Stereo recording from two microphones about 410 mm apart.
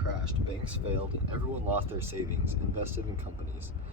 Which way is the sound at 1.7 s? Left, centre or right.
Centre.